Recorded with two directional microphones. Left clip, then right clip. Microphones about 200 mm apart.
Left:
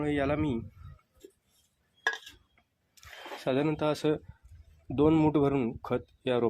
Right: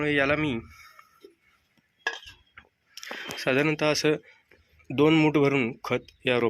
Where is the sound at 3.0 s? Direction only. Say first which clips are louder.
Right 5 dB; 5° left (ahead or behind).